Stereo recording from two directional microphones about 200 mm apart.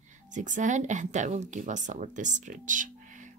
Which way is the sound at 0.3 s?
40° right (ahead or behind).